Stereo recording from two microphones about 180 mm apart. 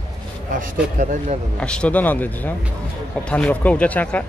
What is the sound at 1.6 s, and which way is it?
Speech, 5° left (ahead or behind).